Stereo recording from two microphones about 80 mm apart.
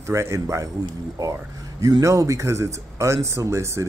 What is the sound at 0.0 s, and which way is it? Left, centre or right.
Speech, right.